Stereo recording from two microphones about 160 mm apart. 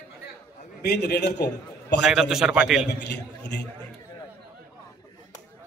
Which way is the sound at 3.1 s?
90° left.